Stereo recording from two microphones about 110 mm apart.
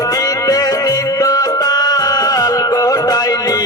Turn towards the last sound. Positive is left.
turn(degrees=35)  # may be behind; listen again after turning